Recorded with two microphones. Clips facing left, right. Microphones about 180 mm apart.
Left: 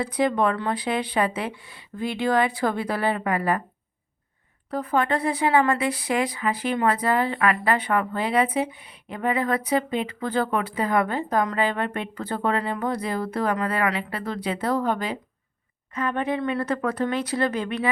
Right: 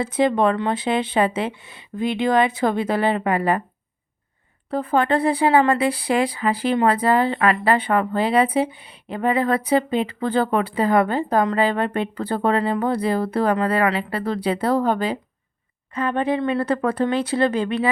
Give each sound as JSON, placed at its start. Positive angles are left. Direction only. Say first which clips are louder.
{"t": 0.0, "sound": "speech", "louder": "right 4 dB", "side_deg": -25}
{"t": 4.7, "sound": "speech", "louder": "right 4 dB", "side_deg": -30}